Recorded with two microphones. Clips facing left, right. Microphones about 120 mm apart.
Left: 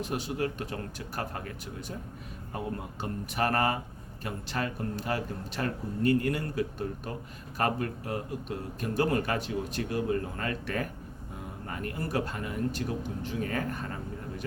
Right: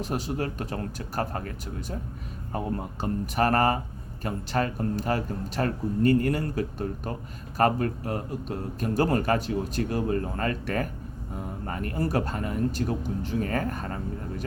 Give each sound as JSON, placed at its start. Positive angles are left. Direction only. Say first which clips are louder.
{"t": 0.0, "sound": "speech", "louder": "right 2 dB", "side_deg": -40}
{"t": 3.0, "sound": "speech", "louder": "right 5 dB", "side_deg": -40}